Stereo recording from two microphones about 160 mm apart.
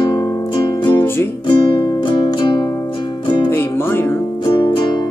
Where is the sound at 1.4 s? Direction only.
30° left (ahead or behind).